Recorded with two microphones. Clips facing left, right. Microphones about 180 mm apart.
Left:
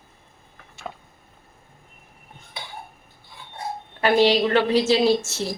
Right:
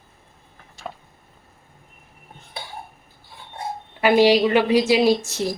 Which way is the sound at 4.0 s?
10° right (ahead or behind).